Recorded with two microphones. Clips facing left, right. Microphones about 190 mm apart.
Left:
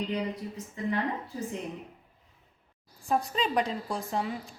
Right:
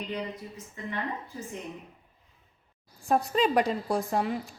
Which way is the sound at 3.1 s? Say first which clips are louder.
Right 4 dB; 55° right (ahead or behind).